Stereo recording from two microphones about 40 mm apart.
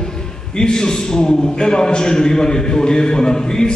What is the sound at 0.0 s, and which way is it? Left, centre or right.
A man's voice, centre.